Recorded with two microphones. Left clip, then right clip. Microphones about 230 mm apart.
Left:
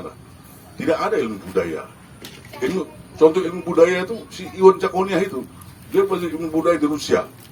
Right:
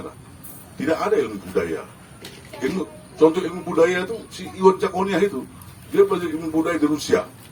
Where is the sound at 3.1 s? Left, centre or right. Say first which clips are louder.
Left 2 dB; left.